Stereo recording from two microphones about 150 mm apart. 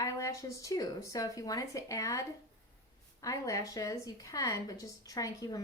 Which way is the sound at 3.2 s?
20° left (ahead or behind).